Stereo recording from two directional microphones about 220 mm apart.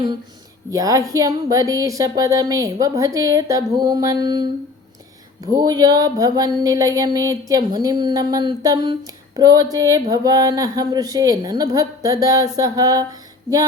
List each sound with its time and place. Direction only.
0.7 s speech: 15° right (ahead or behind)